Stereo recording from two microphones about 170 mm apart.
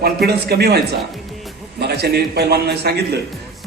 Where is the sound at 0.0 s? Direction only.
70° right (ahead or behind).